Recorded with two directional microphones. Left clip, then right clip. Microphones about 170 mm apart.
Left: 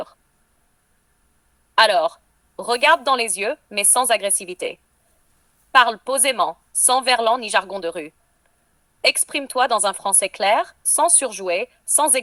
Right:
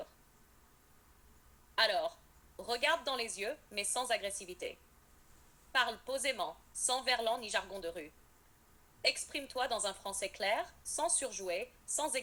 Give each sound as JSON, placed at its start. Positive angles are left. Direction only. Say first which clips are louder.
{"t": 1.7, "sound": "speech", "louder": "left 17 dB", "side_deg": 50}